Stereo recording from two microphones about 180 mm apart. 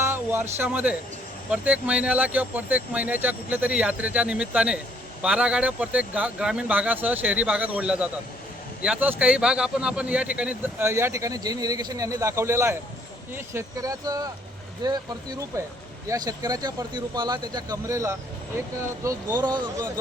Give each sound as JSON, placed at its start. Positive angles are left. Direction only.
{"t": 0.0, "sound": "speech", "side_deg": -10}